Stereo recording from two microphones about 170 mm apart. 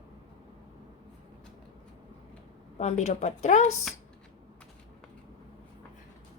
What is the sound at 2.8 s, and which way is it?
Speech, 40° left (ahead or behind).